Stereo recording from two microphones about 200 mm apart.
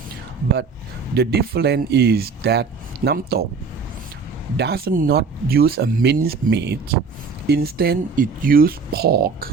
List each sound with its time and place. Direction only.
1.1 s speech: 55° right (ahead or behind)
4.5 s speech: 55° right (ahead or behind)